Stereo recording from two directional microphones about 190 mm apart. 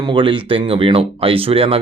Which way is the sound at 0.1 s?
25° right (ahead or behind).